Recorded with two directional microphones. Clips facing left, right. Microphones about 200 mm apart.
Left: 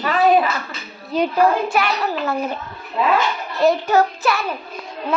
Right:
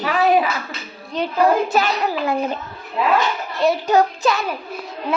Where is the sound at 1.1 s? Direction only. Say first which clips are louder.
Left 4 dB; 5° left (ahead or behind).